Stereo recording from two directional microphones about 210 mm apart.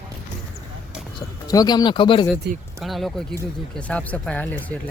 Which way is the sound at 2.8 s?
Centre (ahead or behind).